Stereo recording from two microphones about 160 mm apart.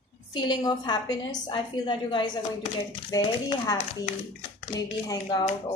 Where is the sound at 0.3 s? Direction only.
30° left (ahead or behind).